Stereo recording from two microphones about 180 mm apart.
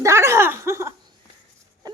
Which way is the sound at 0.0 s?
15° right (ahead or behind).